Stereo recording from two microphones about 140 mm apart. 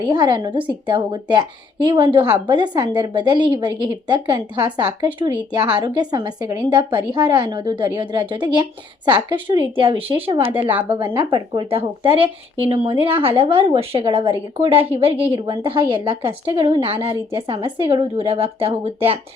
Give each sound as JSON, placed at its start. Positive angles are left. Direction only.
{"t": 0.0, "sound": "speech", "side_deg": -30}
{"t": 11.7, "sound": "speech", "side_deg": -40}